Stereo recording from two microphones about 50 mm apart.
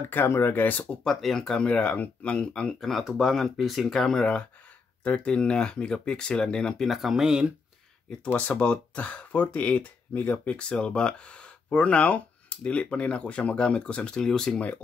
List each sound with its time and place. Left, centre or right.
0.1 s speech: left
1.0 s speech: centre
1.6 s speech: left
3.0 s speech: centre
6.9 s speech: centre
8.4 s speech: left
10.5 s speech: centre
14.5 s speech: left